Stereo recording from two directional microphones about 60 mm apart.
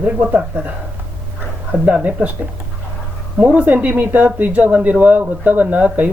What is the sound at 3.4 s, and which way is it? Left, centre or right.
Speech, right.